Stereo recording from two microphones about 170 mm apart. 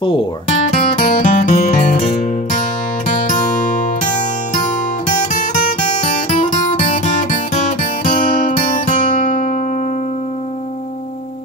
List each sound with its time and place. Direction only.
0.0 s speech: 30° left (ahead or behind)
1.0 s music: 55° left (ahead or behind)
5.3 s music: 50° left (ahead or behind)